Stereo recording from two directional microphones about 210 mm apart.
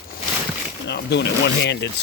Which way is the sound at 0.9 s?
55° left (ahead or behind).